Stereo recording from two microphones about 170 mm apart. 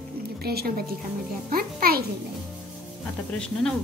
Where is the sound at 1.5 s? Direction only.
60° right (ahead or behind).